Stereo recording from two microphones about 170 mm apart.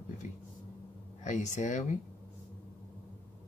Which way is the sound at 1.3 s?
45° left (ahead or behind).